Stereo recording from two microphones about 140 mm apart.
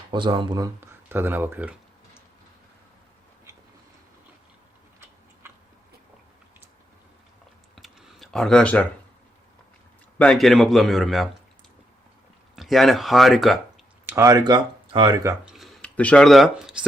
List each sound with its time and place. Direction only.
0.1 s speech: 35° right (ahead or behind)
0.8 s speech: 15° right (ahead or behind)
7.8 s a sound: centre (ahead or behind)
10.2 s a man's voice: 5° left (ahead or behind)
12.5 s a man's voice: centre (ahead or behind)
14.1 s speech: 25° right (ahead or behind)
15.4 s a sound: centre (ahead or behind)
16.0 s a man's voice: 10° left (ahead or behind)